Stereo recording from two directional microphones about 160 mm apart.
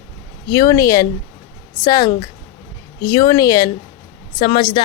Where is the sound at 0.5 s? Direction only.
20° left (ahead or behind).